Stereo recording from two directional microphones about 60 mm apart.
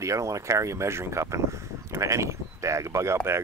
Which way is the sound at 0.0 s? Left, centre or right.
Right.